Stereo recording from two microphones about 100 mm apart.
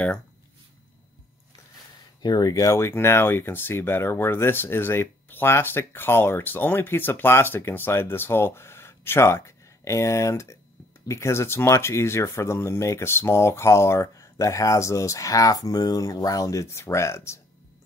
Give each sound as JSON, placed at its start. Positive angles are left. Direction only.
{"t": 2.2, "sound": "speech", "side_deg": 40}